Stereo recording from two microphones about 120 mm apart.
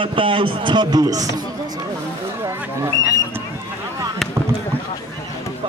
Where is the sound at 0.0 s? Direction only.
45° right (ahead or behind).